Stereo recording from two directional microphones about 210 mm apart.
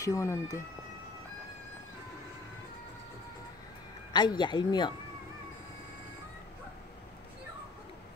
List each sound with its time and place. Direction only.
0.0 s speech: 15° left (ahead or behind)
4.1 s speech: 20° left (ahead or behind)